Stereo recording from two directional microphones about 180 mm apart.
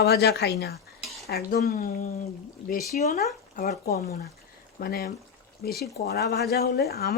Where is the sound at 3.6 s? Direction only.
60° left (ahead or behind).